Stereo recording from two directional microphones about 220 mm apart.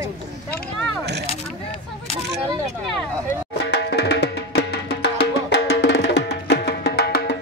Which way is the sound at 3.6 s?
50° left (ahead or behind).